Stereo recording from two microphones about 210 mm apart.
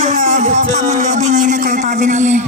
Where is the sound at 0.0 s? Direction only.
35° right (ahead or behind).